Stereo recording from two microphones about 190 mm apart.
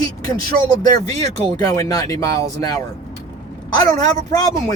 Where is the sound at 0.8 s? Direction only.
20° left (ahead or behind).